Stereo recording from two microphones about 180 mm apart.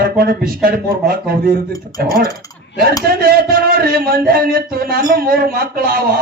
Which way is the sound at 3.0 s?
55° right (ahead or behind).